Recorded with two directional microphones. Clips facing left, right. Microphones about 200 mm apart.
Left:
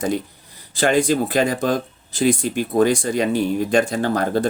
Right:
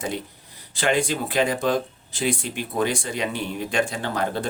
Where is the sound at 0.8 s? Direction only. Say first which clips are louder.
Left 6 dB; 40° left (ahead or behind).